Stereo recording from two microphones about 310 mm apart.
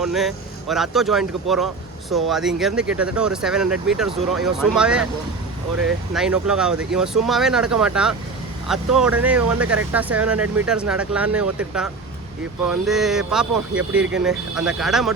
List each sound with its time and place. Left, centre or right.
0.0 s speech: centre
6.1 s speech: centre